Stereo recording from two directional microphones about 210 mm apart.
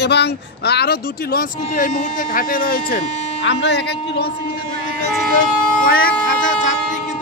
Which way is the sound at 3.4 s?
55° left (ahead or behind).